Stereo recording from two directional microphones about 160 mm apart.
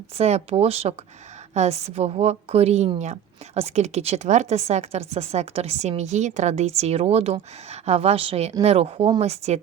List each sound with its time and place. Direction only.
0.2 s a woman's voice: 40° right (ahead or behind)